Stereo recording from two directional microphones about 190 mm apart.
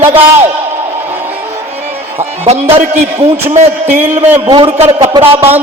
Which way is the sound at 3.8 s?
10° right (ahead or behind).